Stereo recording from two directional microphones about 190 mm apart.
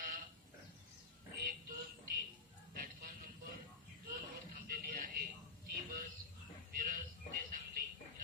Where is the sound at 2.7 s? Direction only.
45° right (ahead or behind).